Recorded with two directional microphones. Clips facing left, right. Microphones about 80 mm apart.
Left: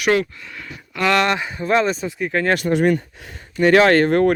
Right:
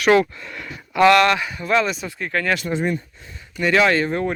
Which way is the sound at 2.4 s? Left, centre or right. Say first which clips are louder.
Left 6 dB; left.